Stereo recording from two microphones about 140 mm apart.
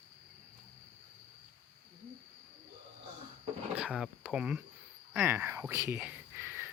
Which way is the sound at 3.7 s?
5° right (ahead or behind).